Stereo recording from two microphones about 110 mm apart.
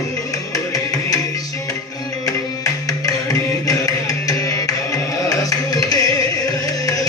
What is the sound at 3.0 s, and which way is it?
Music, 30° left (ahead or behind).